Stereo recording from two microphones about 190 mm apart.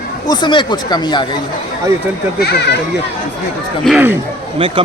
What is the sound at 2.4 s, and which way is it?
Speech, 65° left (ahead or behind).